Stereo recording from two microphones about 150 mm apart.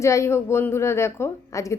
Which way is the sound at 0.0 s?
20° left (ahead or behind).